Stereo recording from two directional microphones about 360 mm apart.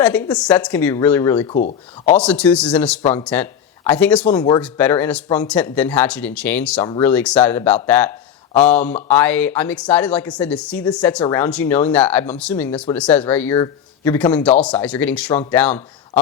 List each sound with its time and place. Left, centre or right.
0.0 s speech: centre
1.5 s speech: centre
2.1 s speech: centre